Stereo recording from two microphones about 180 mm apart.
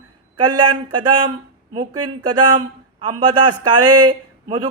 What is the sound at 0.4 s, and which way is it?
Speech, 25° right (ahead or behind).